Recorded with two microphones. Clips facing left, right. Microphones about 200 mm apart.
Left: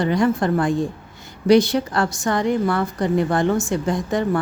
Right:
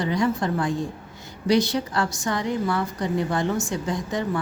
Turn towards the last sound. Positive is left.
turn(degrees=55)  # may be behind; listen again after turning